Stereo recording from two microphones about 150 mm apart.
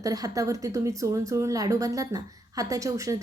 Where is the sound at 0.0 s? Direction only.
25° right (ahead or behind).